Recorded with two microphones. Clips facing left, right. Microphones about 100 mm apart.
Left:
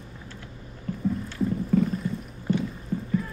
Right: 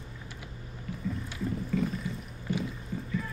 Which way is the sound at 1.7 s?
45° left (ahead or behind).